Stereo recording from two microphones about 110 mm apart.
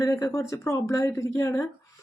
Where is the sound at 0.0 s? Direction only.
30° left (ahead or behind).